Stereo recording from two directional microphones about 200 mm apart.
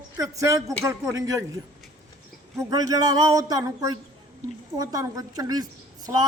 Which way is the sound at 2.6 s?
20° right (ahead or behind).